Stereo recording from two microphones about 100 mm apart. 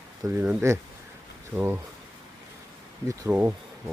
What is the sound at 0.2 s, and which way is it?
Speech, 35° right (ahead or behind).